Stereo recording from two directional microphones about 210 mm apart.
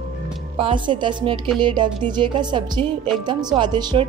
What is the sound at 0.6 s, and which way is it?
Speech, 25° right (ahead or behind).